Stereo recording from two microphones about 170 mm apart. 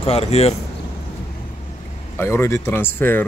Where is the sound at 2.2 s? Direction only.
15° left (ahead or behind).